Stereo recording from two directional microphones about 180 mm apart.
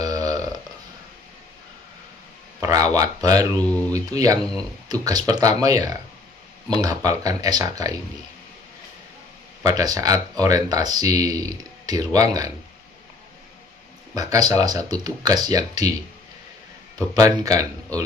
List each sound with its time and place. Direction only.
0.0 s a sound: 20° right (ahead or behind)
2.6 s speech: 20° right (ahead or behind)
3.6 s speech: 5° left (ahead or behind)
3.9 s speech: 20° right (ahead or behind)
9.6 s speech: 20° right (ahead or behind)
14.1 s speech: 20° right (ahead or behind)
17.1 s speech: 20° right (ahead or behind)